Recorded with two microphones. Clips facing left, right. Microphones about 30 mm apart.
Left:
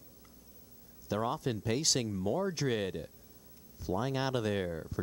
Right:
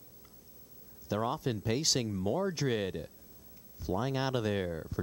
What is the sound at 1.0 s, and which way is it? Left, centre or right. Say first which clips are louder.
Speech: even; centre.